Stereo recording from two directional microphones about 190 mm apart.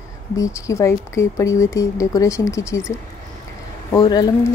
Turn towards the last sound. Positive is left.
turn(degrees=20)  # may be behind; listen again after turning